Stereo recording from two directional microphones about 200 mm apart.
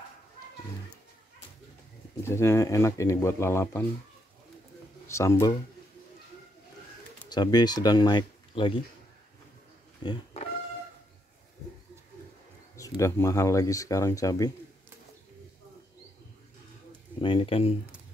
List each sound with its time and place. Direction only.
2.2 s speech: 15° left (ahead or behind)
5.0 s speech: 15° left (ahead or behind)
7.2 s speech: 20° left (ahead or behind)
10.0 s a sound: 35° left (ahead or behind)
12.7 s speech: 15° left (ahead or behind)
17.2 s speech: 25° left (ahead or behind)